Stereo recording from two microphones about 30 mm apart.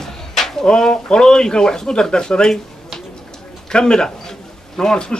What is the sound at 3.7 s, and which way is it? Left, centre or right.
A man's voice, left.